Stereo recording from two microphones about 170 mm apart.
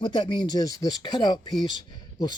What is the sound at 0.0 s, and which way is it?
Speech, 30° left (ahead or behind).